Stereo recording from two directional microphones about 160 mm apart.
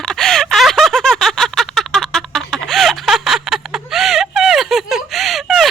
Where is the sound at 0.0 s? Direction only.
5° left (ahead or behind).